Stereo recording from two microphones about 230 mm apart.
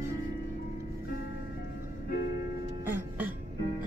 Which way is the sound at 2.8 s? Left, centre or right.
Centre.